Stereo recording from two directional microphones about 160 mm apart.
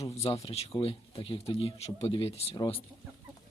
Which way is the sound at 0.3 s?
40° left (ahead or behind).